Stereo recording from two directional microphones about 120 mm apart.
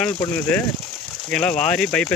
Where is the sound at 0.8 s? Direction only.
Centre (ahead or behind).